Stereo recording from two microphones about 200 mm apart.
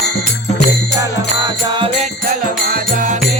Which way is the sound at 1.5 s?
20° right (ahead or behind).